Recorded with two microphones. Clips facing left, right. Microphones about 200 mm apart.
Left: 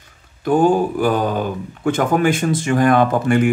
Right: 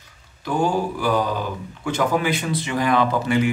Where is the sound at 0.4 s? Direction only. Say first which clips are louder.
Left 7 dB; 50° left (ahead or behind).